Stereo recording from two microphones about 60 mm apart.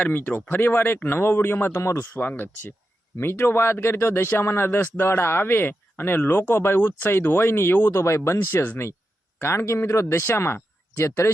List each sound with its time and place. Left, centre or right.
0.0 s speech: left
7.9 s speech: left